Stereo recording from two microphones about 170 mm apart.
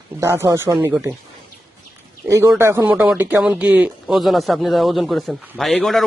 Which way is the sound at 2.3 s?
15° right (ahead or behind).